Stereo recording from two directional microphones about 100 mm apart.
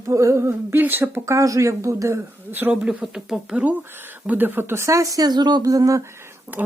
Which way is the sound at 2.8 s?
5° right (ahead or behind).